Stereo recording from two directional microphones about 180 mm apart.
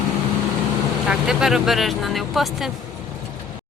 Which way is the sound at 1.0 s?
5° right (ahead or behind).